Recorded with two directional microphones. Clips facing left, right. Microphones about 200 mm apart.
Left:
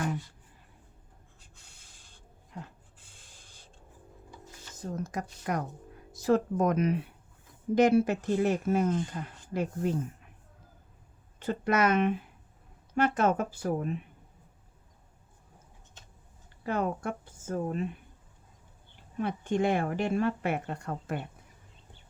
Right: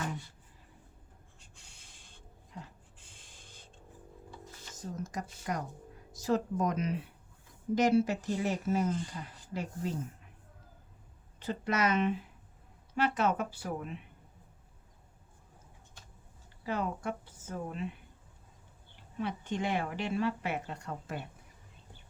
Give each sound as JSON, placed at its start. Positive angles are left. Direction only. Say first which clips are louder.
{"t": 5.1, "sound": "speech", "louder": "left 4 dB", "side_deg": 60}
{"t": 11.3, "sound": "speech", "louder": "left 5 dB", "side_deg": 55}
{"t": 16.6, "sound": "speech", "louder": "left 4 dB", "side_deg": 50}
{"t": 19.1, "sound": "speech", "louder": "left 6 dB", "side_deg": 50}